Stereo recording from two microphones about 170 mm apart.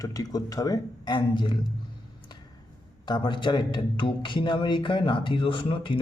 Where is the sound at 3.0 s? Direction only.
25° left (ahead or behind).